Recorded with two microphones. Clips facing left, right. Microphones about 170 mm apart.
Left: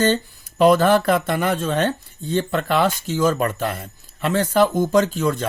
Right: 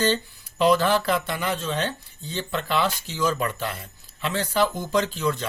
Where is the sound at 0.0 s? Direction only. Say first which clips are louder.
Left 4 dB; 50° left (ahead or behind).